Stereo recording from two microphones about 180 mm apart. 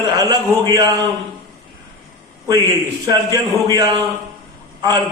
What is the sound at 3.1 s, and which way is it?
A man's voice, 20° right (ahead or behind).